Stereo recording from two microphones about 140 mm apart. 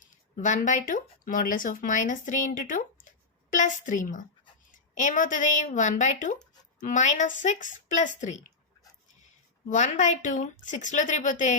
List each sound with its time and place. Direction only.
0.0 s a woman's voice: 60° left (ahead or behind)
9.6 s speech: 60° left (ahead or behind)